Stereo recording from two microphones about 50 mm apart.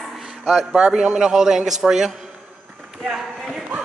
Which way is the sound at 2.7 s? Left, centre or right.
Centre.